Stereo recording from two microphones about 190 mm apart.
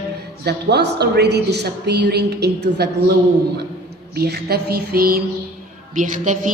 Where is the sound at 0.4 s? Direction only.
60° right (ahead or behind).